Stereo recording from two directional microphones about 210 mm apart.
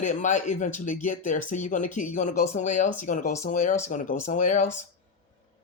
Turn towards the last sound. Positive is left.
turn(degrees=35)  # may be behind; listen again after turning